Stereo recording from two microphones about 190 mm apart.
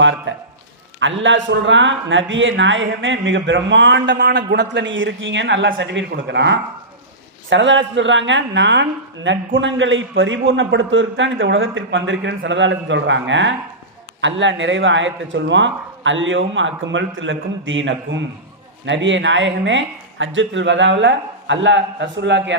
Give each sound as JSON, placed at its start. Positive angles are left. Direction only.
{"t": 0.3, "sound": "a man's voice", "side_deg": -75}